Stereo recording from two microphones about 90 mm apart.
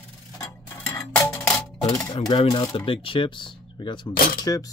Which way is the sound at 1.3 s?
10° left (ahead or behind).